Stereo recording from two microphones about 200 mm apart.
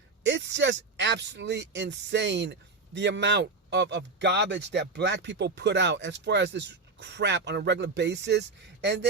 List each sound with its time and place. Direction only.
0.2 s speech: 60° right (ahead or behind)